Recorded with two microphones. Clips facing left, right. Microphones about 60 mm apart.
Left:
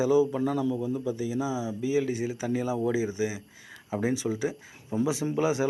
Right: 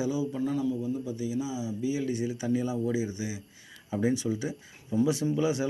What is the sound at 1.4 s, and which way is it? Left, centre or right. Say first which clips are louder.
Speech: left 3 dB; left.